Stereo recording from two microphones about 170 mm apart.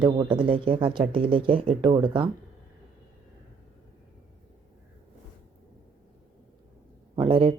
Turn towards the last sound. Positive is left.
turn(degrees=-30)  # may be behind; listen again after turning